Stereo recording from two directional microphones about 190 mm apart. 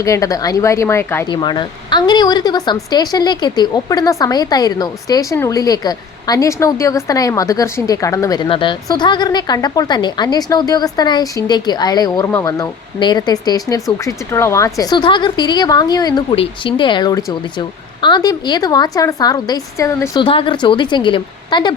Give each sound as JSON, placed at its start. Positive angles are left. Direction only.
{"t": 0.0, "sound": "speech", "side_deg": 15}
{"t": 20.2, "sound": "speech", "side_deg": 25}